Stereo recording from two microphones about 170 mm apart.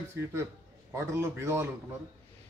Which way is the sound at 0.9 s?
15° right (ahead or behind).